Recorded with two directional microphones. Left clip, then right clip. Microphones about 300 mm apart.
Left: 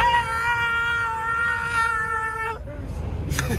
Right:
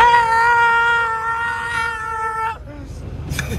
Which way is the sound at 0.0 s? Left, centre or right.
Right.